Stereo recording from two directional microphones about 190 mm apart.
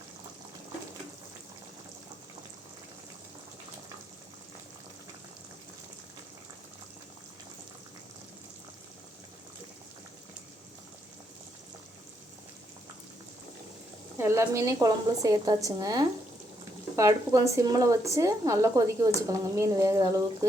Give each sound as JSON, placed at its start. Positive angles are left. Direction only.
{"t": 14.2, "sound": "a woman's voice", "side_deg": -15}